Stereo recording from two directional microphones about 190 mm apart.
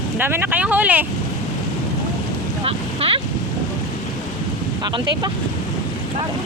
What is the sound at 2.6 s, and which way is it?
Speech, 30° right (ahead or behind).